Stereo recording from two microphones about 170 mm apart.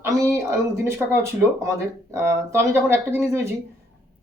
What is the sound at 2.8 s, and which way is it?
Speech, 15° right (ahead or behind).